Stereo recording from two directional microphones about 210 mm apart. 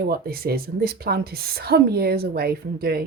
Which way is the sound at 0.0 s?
45° right (ahead or behind).